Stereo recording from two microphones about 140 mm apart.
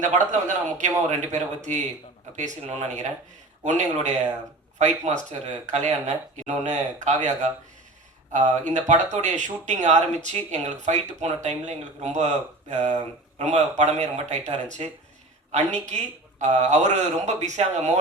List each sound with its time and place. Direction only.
0.0 s speech: 60° right (ahead or behind)
8.3 s speech: 60° right (ahead or behind)